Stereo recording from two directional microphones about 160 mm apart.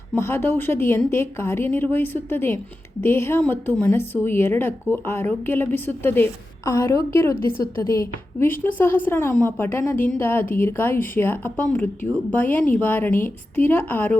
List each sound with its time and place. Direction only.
0.2 s a woman's voice: 15° left (ahead or behind)